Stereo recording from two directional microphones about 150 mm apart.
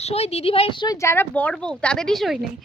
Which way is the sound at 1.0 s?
15° left (ahead or behind).